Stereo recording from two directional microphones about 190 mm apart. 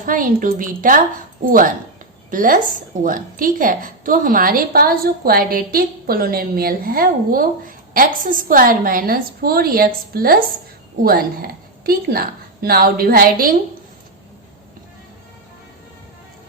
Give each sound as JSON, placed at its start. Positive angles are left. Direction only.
{"t": 0.0, "sound": "a woman's voice", "side_deg": -45}